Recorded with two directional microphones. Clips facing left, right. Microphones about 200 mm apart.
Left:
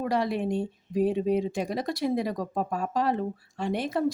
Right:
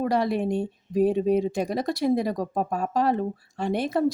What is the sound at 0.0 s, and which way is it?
Speech, 40° right (ahead or behind).